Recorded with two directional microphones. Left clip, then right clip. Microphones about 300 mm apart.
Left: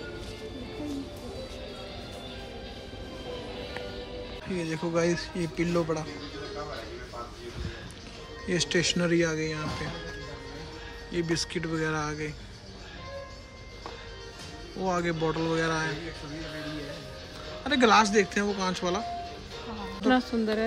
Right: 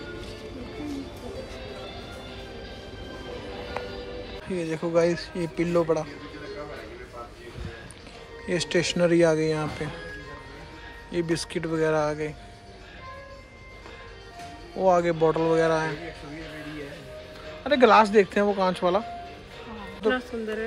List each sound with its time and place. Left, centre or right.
4.5 s speech: centre
8.5 s speech: centre
11.1 s speech: centre
14.8 s speech: centre
17.6 s speech: centre
20.2 s speech: left